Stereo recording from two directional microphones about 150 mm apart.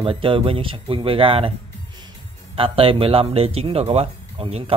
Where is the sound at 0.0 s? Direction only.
35° right (ahead or behind).